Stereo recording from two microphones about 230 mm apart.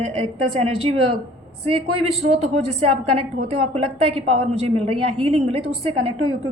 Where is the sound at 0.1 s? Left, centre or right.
Right.